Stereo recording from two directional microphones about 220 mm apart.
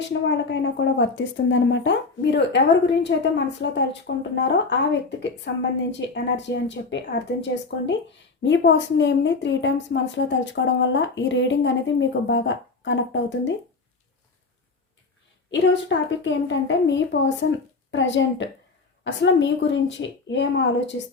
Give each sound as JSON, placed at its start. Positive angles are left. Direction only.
{"t": 0.1, "sound": "a woman's voice", "side_deg": 55}
{"t": 15.4, "sound": "a woman's voice", "side_deg": 55}